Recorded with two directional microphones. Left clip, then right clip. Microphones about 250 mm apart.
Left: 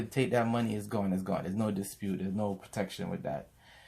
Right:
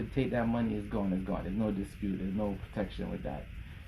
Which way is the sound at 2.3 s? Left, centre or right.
Left.